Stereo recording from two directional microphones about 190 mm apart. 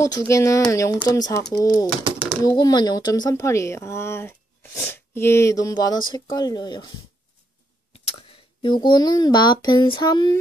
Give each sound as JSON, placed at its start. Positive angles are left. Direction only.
{"t": 0.0, "sound": "speech", "side_deg": 20}
{"t": 8.1, "sound": "speech", "side_deg": 25}